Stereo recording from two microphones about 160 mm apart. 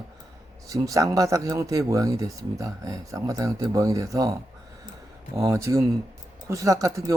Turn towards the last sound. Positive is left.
turn(degrees=-20)  # may be behind; listen again after turning